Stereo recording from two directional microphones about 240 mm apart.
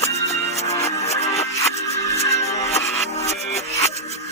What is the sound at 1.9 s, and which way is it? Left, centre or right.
Music, centre.